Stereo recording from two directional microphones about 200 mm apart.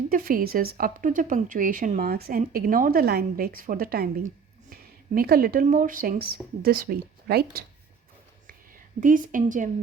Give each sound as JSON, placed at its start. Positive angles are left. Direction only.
{"t": 0.1, "sound": "a woman's voice", "side_deg": -45}
{"t": 9.0, "sound": "a woman's voice", "side_deg": -40}